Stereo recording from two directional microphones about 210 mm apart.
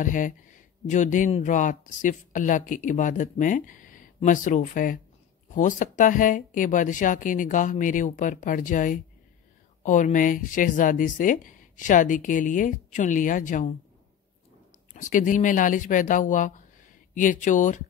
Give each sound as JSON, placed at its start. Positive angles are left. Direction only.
{"t": 0.0, "sound": "speech", "side_deg": 40}
{"t": 15.0, "sound": "speech", "side_deg": 35}